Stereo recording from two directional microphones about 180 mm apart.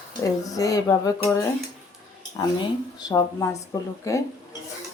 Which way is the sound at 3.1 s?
20° left (ahead or behind).